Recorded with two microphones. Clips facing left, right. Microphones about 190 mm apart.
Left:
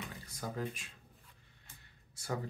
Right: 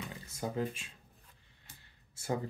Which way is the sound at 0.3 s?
25° right (ahead or behind).